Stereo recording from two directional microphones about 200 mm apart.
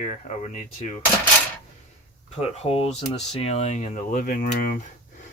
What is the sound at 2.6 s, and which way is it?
Speech, 30° left (ahead or behind).